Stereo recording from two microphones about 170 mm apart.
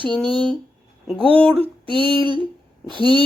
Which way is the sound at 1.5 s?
30° right (ahead or behind).